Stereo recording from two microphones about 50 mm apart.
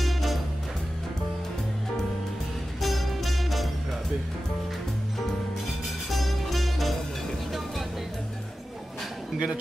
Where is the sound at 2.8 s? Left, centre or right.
Centre.